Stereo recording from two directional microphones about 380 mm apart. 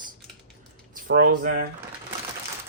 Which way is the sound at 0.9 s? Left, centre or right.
Right.